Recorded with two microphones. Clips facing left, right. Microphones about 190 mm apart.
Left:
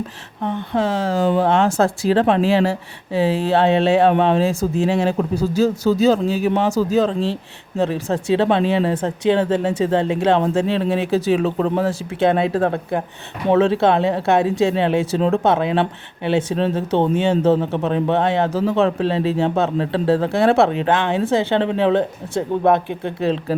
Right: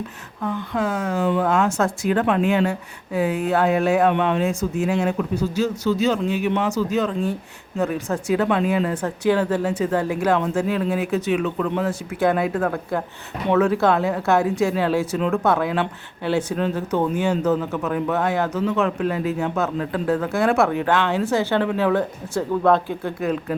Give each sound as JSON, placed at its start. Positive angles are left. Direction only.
{"t": 0.4, "sound": "speech", "side_deg": 25}